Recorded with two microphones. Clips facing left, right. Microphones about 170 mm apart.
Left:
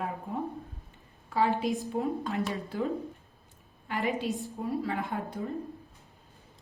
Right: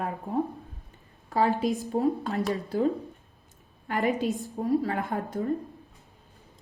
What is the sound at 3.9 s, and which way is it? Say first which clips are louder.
Speech: right 4 dB; 45° right (ahead or behind).